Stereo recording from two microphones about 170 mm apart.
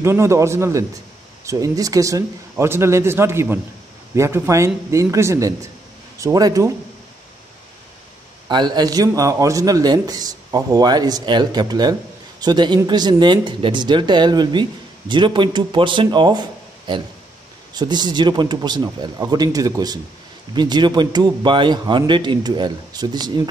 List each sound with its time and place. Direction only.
0.0 s a man's voice: 15° right (ahead or behind)
8.5 s speech: 25° right (ahead or behind)